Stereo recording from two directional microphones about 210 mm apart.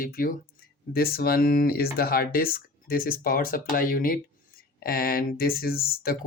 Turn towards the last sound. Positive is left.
turn(degrees=45)  # may be behind; listen again after turning